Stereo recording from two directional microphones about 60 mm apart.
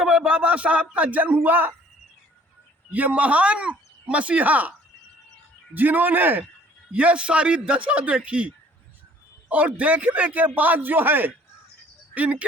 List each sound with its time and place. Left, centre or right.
0.0 s a sound: centre
0.3 s speech: right
2.9 s speech: right
5.7 s a man's voice: right
6.9 s speech: right